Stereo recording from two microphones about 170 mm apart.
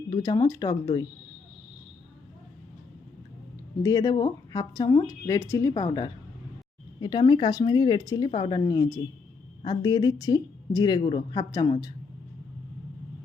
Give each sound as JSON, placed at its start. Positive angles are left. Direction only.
{"t": 0.1, "sound": "speech", "side_deg": 20}
{"t": 3.8, "sound": "speech", "side_deg": 25}